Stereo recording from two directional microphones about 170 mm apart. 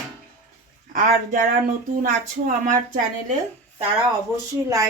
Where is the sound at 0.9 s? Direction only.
55° right (ahead or behind).